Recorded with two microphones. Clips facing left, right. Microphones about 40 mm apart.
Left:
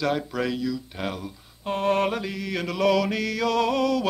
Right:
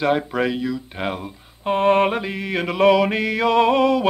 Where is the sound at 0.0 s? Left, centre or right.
Right.